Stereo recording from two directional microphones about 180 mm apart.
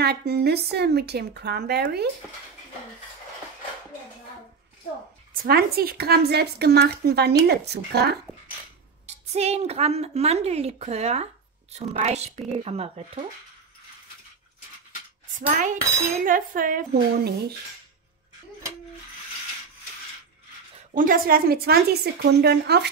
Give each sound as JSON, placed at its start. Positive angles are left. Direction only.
{"t": 0.0, "sound": "speech", "side_deg": -65}
{"t": 5.3, "sound": "speech", "side_deg": -55}
{"t": 9.0, "sound": "a woman's voice", "side_deg": -35}
{"t": 15.3, "sound": "a woman's voice", "side_deg": -45}
{"t": 20.9, "sound": "speech", "side_deg": -50}